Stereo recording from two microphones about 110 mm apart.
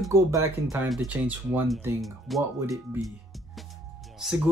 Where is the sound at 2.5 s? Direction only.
30° right (ahead or behind).